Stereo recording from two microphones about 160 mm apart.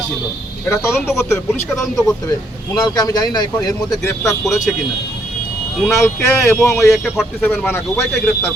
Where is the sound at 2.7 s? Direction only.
25° left (ahead or behind).